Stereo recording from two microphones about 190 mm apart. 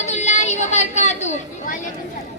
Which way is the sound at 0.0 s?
35° left (ahead or behind).